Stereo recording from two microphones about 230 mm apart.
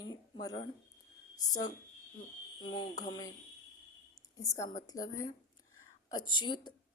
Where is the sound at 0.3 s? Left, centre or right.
Centre.